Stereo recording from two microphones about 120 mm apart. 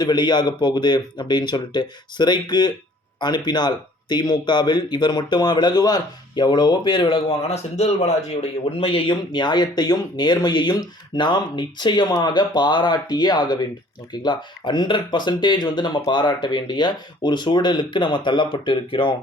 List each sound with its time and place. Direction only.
0.0 s speech: 35° left (ahead or behind)